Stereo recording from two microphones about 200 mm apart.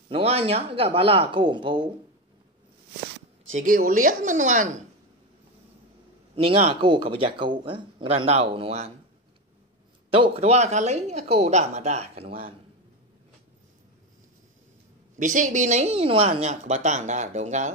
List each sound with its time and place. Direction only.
0.1 s speech: 30° right (ahead or behind)
3.5 s speech: 45° right (ahead or behind)
6.3 s speech: 30° right (ahead or behind)
10.1 s speech: 30° right (ahead or behind)
15.1 s speech: 40° right (ahead or behind)